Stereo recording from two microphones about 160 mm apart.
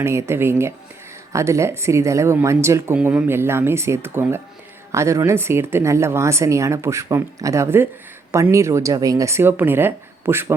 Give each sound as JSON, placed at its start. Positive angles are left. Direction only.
{"t": 0.0, "sound": "speech", "side_deg": -15}